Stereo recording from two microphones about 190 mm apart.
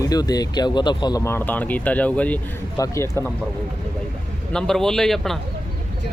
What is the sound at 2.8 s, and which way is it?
Speech, 20° left (ahead or behind).